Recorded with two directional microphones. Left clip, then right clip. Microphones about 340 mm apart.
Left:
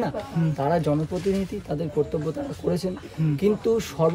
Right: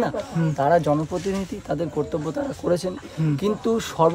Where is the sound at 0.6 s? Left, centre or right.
Centre.